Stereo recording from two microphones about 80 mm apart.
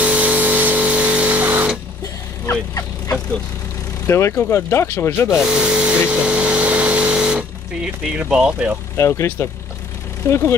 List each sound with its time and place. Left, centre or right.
0.0 s printer: centre
4.1 s speech: left
5.5 s a sound: centre
8.9 s speech: left